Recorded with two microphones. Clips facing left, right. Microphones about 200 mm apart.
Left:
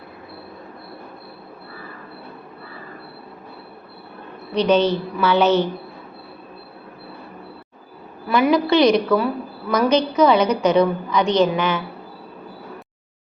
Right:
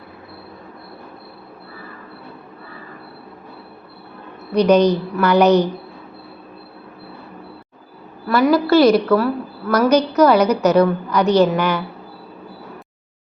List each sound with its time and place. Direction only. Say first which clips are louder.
4.5 s a woman's voice: right 4 dB; 10° right (ahead or behind)
8.3 s a woman's voice: right 2 dB; 15° left (ahead or behind)
8.5 s a woman's voice: right 3 dB; 5° right (ahead or behind)